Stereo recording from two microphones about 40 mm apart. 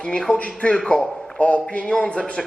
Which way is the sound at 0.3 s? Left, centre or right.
Left.